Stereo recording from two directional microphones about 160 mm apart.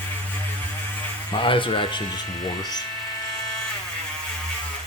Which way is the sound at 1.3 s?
30° left (ahead or behind).